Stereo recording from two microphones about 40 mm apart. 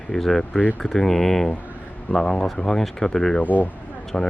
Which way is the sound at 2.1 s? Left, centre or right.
Centre.